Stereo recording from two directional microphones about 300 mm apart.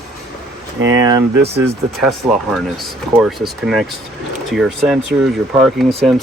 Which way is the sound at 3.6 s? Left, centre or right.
Centre.